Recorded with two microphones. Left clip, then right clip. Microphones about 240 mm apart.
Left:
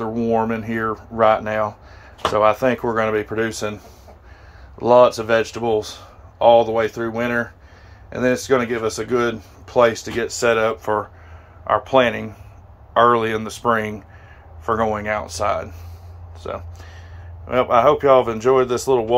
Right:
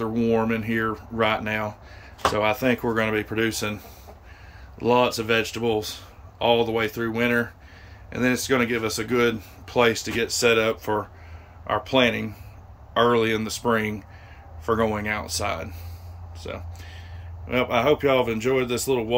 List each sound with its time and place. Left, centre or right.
0.4 s speech: centre